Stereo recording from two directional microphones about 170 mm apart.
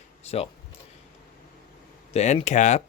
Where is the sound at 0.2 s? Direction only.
35° left (ahead or behind).